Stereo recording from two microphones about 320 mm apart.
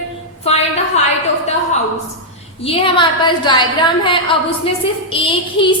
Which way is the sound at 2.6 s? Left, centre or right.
Centre.